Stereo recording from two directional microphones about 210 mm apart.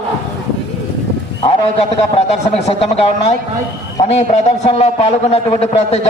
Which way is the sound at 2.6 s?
30° left (ahead or behind).